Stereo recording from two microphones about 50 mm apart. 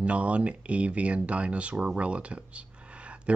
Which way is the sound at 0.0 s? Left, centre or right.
Right.